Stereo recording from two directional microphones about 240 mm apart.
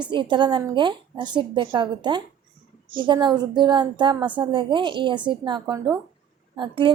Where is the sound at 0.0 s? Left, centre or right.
Centre.